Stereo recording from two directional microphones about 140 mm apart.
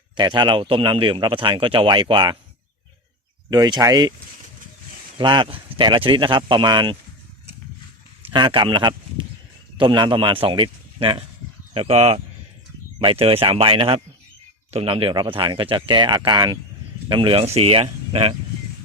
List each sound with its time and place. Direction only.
0.2 s speech: 30° right (ahead or behind)
3.5 s speech: 30° right (ahead or behind)
5.1 s speech: 35° right (ahead or behind)
8.2 s speech: 35° right (ahead or behind)